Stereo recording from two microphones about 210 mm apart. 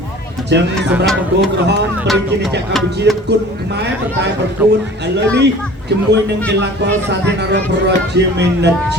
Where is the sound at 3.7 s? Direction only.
55° right (ahead or behind).